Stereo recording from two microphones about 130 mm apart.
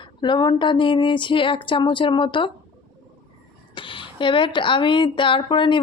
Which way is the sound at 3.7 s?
40° left (ahead or behind).